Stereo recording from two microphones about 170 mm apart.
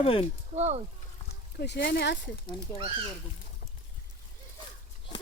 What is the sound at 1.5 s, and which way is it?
Speech, 85° left.